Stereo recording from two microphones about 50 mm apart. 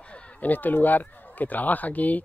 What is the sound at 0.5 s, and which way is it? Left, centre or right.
Speech, left.